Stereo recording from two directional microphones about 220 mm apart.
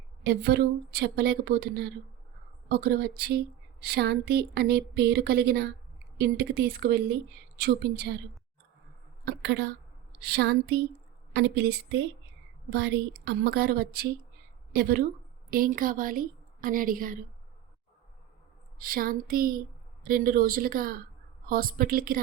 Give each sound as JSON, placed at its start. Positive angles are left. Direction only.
{"t": 0.2, "sound": "speech", "side_deg": -45}
{"t": 9.2, "sound": "a woman's voice", "side_deg": -50}
{"t": 18.8, "sound": "speech", "side_deg": -40}